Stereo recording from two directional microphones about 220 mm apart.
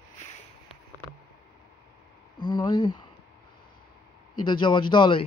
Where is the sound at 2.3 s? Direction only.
20° left (ahead or behind).